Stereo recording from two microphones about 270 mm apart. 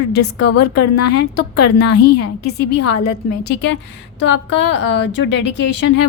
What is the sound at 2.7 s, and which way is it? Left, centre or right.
Speech, left.